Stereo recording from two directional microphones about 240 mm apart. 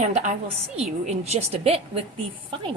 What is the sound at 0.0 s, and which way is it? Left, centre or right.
A woman's voice, right.